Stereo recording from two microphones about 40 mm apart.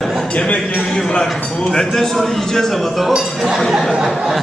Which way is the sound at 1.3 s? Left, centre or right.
Centre.